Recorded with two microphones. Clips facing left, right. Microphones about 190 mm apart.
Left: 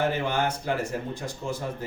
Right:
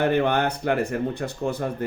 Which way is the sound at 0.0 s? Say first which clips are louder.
Right 5 dB; 60° right (ahead or behind).